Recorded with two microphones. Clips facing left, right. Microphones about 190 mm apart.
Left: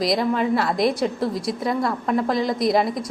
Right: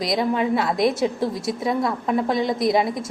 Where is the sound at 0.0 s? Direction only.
Centre (ahead or behind).